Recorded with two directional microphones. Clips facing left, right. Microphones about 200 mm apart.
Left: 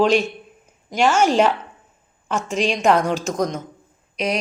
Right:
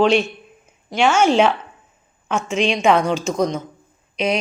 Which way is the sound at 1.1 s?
35° left (ahead or behind).